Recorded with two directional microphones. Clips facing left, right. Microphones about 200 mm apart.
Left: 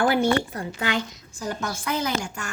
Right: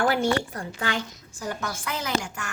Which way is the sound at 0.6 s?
20° left (ahead or behind).